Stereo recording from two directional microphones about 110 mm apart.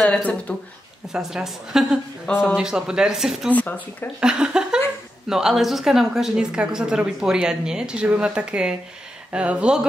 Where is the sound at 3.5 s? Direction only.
15° left (ahead or behind).